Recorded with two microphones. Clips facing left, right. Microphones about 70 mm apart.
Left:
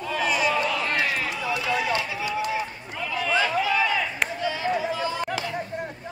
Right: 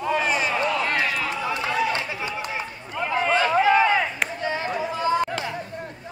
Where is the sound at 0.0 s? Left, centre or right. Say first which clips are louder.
Right 1 dB; right.